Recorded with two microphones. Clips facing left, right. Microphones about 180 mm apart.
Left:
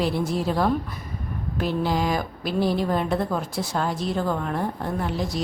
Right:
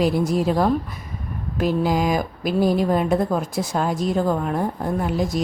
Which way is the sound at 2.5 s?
45° right (ahead or behind).